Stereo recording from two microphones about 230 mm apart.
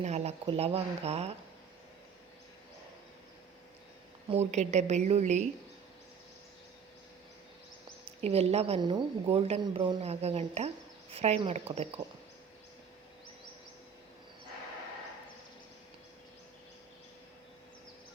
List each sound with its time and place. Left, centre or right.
0.0 s speech: right
4.3 s speech: right
8.2 s speech: right